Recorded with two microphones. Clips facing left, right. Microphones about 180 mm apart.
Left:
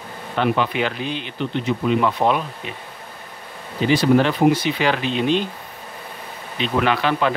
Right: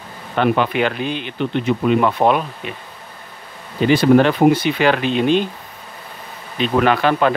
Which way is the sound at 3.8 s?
55° right (ahead or behind).